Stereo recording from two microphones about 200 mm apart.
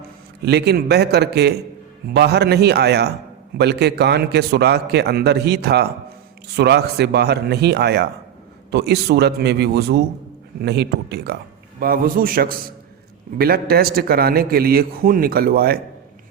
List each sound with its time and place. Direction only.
0.4 s a man's voice: 55° right (ahead or behind)